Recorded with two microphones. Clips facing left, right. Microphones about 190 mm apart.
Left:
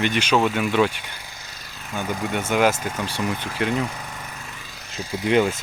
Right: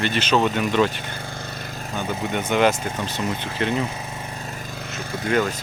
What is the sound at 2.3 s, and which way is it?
Speech, 5° left (ahead or behind).